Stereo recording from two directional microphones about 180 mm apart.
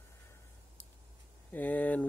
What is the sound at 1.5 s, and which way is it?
Speech, 10° left (ahead or behind).